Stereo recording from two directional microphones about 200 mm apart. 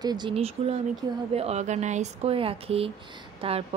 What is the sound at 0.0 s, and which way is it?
Speech, 20° right (ahead or behind).